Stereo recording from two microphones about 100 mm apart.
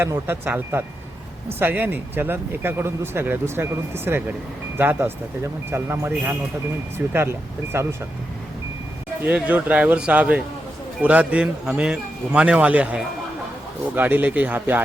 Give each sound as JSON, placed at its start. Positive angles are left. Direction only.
{"t": 0.0, "sound": "speech", "side_deg": -25}
{"t": 7.1, "sound": "speech", "side_deg": -25}
{"t": 9.2, "sound": "speech", "side_deg": -15}